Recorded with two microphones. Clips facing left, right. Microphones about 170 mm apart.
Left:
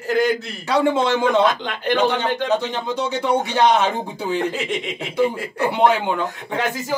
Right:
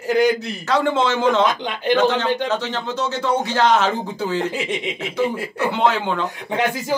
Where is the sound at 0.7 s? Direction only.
10° left (ahead or behind).